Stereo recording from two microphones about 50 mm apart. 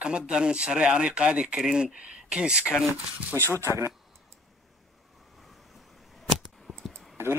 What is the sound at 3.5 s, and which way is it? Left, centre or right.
Speech, right.